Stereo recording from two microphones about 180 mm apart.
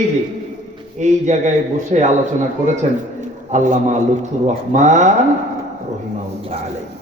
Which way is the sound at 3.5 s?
40° right (ahead or behind).